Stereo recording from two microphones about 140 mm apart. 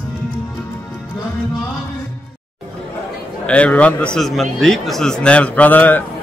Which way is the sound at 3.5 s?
10° left (ahead or behind).